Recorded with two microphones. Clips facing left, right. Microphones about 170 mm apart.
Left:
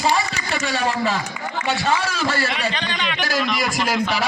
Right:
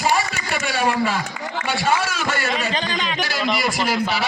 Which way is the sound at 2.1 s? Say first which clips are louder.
Left 2 dB; 35° left (ahead or behind).